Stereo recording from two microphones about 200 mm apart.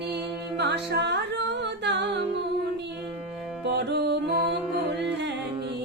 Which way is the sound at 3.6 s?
55° right (ahead or behind).